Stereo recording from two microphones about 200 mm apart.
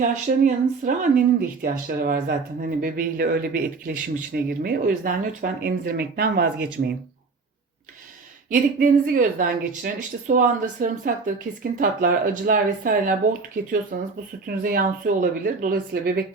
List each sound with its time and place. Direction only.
0.0 s speech: 40° right (ahead or behind)
8.4 s speech: 40° right (ahead or behind)